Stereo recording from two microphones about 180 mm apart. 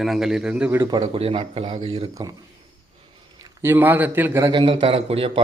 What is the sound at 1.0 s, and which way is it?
Speech, 30° right (ahead or behind).